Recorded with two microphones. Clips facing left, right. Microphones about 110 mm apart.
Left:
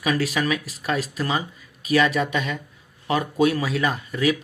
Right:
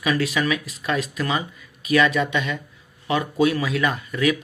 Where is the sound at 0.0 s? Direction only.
40° left (ahead or behind).